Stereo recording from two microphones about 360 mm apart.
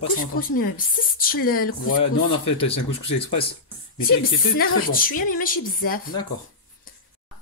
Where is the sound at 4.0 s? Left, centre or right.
Left.